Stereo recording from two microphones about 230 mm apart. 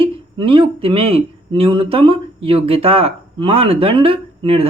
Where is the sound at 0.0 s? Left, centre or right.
Right.